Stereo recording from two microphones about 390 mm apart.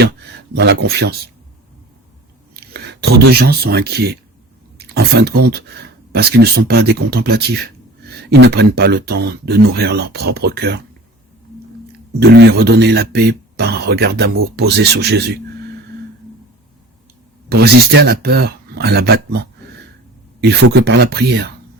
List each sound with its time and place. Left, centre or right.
0.5 s speech: right
2.7 s speech: right
12.2 s speech: right
17.5 s speech: right